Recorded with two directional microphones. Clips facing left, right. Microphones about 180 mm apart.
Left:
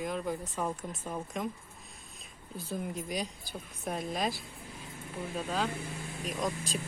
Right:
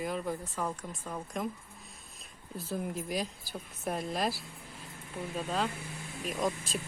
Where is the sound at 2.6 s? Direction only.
Centre (ahead or behind).